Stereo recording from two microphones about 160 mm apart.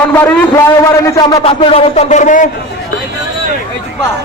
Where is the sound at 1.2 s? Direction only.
30° left (ahead or behind); by 2.4 s 50° left (ahead or behind).